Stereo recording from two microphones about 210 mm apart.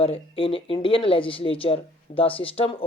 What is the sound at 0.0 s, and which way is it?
Speech, 25° left (ahead or behind).